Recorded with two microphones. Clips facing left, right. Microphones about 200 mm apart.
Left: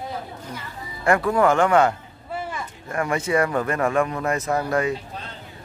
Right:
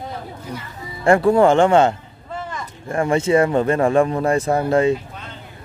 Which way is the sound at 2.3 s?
10° left (ahead or behind).